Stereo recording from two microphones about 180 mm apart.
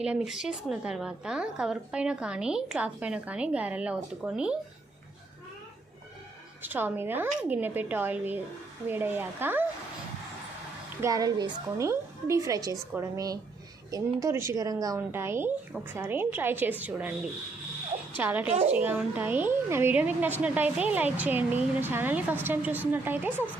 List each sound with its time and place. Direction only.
0.0 s a woman's voice: 5° right (ahead or behind)
6.6 s speech: 10° right (ahead or behind)
11.0 s a woman's voice: 20° right (ahead or behind)
18.2 s speech: 10° right (ahead or behind)